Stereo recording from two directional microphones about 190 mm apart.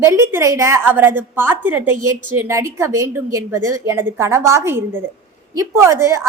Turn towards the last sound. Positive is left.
turn(degrees=-15)  # may be behind; listen again after turning